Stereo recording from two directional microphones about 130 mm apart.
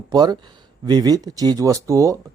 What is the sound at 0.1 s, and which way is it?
Speech, 30° right (ahead or behind).